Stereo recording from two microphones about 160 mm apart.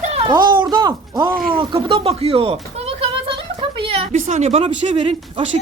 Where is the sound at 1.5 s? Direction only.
30° right (ahead or behind).